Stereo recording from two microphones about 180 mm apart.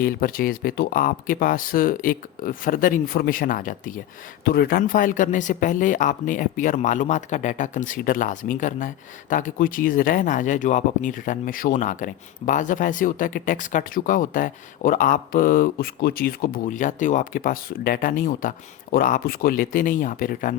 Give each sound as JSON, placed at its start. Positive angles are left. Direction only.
{"t": 0.0, "sound": "speech", "side_deg": 55}